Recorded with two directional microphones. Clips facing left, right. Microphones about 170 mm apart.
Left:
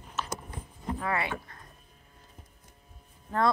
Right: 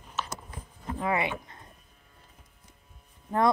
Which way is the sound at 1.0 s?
20° right (ahead or behind).